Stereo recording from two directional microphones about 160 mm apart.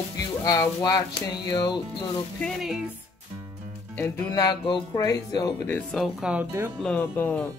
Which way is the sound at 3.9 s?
20° left (ahead or behind).